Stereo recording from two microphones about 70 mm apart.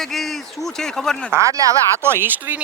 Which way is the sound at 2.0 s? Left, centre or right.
Right.